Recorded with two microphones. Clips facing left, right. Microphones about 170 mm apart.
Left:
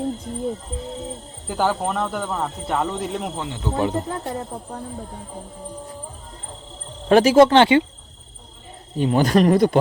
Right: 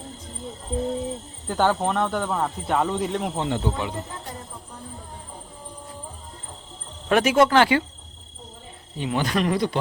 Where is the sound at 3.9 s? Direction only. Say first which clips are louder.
Left 8 dB; 55° left (ahead or behind).